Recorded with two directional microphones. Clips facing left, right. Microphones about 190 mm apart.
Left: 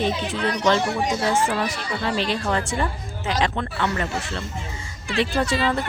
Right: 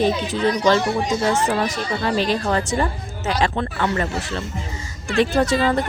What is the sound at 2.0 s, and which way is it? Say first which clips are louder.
Speech: right 3 dB; 40° right (ahead or behind).